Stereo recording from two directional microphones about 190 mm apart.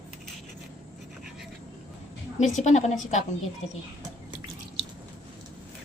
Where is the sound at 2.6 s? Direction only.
35° left (ahead or behind).